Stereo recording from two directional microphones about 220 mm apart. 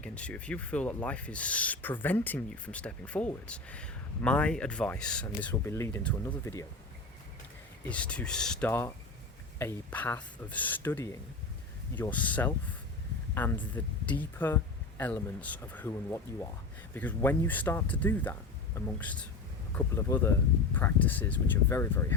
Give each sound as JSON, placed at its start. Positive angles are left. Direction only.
{"t": 0.0, "sound": "speech", "side_deg": 5}
{"t": 7.9, "sound": "speech", "side_deg": 5}